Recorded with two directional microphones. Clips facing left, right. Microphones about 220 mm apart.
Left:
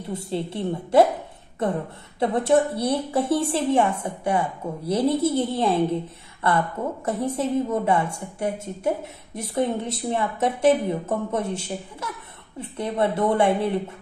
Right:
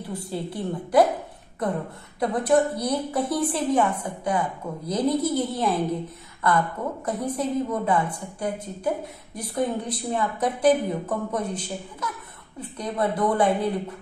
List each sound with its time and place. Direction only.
0.1 s a woman's voice: 25° left (ahead or behind)